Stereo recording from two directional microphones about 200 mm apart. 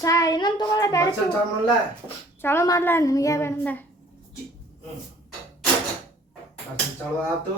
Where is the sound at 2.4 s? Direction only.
10° left (ahead or behind).